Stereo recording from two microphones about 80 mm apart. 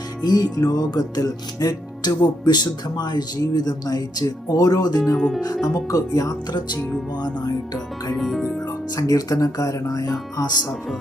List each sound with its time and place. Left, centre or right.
0.3 s music: left
5.1 s speech: centre
5.6 s speech: left
8.1 s speech: centre
9.0 s speech: left